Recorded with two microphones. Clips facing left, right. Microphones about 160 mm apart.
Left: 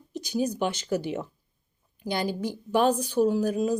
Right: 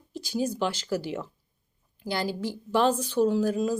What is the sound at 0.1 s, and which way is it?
A woman's voice, 15° left (ahead or behind).